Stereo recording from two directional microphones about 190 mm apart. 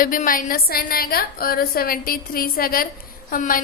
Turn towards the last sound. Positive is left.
turn(degrees=45)  # may be behind; listen again after turning